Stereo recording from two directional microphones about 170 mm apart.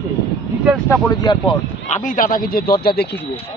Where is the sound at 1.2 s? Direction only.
25° left (ahead or behind).